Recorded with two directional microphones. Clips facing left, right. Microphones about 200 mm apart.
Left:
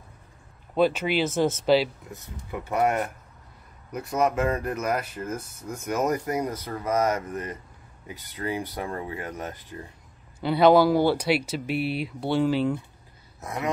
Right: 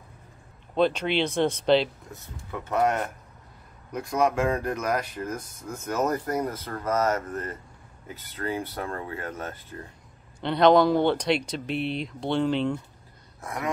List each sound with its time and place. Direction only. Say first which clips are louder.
0.7 s speech: left 1 dB; 5° left (ahead or behind)
13.4 s speech: left 2 dB; 20° left (ahead or behind)